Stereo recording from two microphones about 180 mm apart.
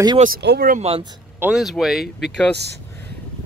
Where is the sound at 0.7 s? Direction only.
35° right (ahead or behind).